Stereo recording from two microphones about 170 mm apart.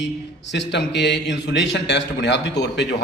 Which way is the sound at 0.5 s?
90° left.